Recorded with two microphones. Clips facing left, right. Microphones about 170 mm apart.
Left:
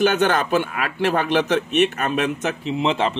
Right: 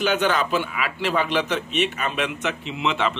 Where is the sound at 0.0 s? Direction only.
50° left (ahead or behind).